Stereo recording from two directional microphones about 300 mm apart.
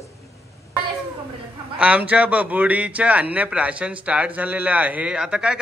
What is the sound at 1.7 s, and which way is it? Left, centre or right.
A man's voice, centre.